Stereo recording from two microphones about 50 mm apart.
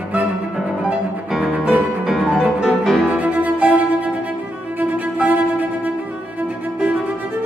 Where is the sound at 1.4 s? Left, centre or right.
Right.